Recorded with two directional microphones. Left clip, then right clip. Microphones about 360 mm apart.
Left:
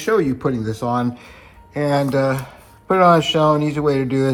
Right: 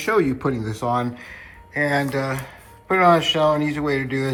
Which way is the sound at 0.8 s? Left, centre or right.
Left.